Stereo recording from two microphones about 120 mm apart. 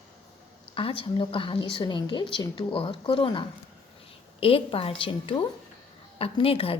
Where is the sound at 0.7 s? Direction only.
50° left (ahead or behind).